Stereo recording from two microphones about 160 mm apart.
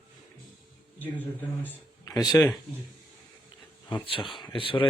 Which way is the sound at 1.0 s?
10° left (ahead or behind).